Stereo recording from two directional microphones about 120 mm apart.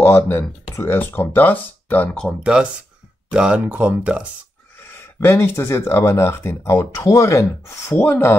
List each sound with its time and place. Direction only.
0.0 s speech: 20° left (ahead or behind)
2.2 s speech: 10° right (ahead or behind)
4.8 s speech: 20° left (ahead or behind)